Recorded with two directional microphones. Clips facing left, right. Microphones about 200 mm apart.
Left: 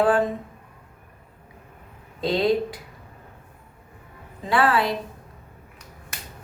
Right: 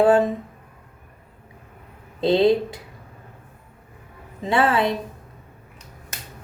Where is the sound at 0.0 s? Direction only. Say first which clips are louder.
Right 4 dB; 25° right (ahead or behind).